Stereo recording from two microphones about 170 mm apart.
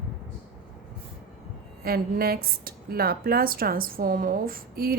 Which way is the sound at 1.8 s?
60° right (ahead or behind).